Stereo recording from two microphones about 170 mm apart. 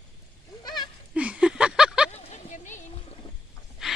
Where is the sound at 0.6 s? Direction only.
25° left (ahead or behind).